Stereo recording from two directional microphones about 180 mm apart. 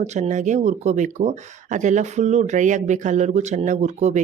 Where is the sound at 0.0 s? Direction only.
40° right (ahead or behind).